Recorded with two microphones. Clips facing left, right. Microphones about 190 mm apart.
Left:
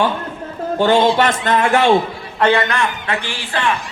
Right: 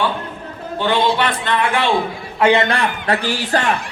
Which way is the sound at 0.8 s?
45° left (ahead or behind).